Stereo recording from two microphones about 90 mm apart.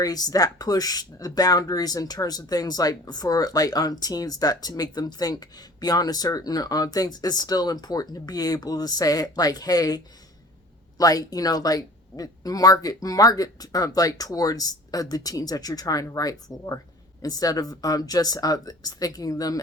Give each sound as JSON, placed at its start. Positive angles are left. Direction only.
{"t": 0.0, "sound": "speech", "side_deg": 45}